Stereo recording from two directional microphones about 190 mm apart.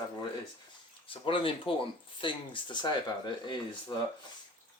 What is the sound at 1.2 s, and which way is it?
Speech, 25° left (ahead or behind).